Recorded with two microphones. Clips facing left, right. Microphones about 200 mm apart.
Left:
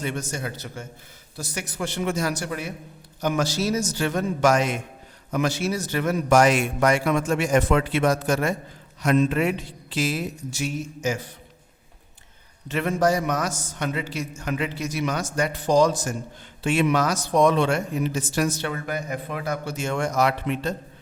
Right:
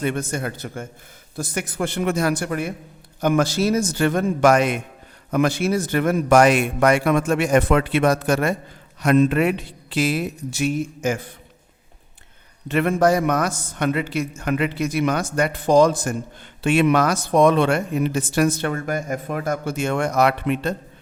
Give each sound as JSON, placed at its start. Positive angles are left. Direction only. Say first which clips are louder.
{"t": 0.0, "sound": "speech", "louder": "right 5 dB", "side_deg": -55}
{"t": 12.6, "sound": "speech", "louder": "right 4 dB", "side_deg": -60}